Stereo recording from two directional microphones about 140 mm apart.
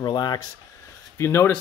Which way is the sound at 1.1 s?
15° left (ahead or behind).